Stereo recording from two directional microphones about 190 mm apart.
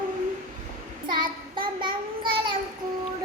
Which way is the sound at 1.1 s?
25° right (ahead or behind).